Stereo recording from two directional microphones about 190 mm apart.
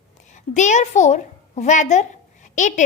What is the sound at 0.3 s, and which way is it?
A woman's voice, 40° left (ahead or behind).